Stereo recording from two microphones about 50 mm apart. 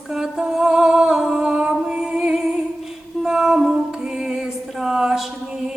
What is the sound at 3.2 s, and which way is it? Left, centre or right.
Music, centre.